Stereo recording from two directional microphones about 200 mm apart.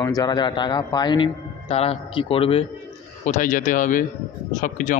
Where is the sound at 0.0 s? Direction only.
20° left (ahead or behind).